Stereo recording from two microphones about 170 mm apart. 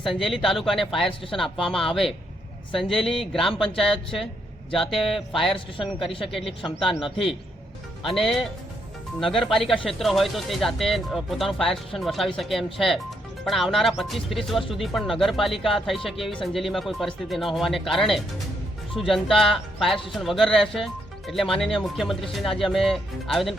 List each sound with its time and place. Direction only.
0.0 s speech: centre (ahead or behind)
5.5 s a man's voice: 30° left (ahead or behind)
8.1 s speech: centre (ahead or behind)